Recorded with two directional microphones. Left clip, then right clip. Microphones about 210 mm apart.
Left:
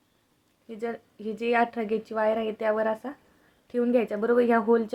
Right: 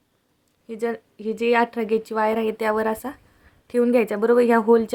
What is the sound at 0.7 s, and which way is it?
Speech, 35° right (ahead or behind).